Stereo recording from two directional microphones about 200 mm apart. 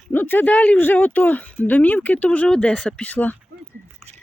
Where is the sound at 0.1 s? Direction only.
10° left (ahead or behind).